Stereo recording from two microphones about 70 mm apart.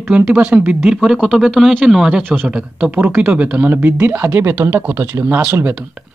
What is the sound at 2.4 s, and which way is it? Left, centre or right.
Speech, centre.